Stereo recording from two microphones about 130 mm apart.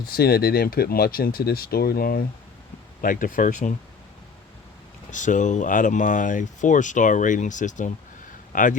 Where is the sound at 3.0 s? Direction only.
90° left; by 3.7 s 70° left (ahead or behind).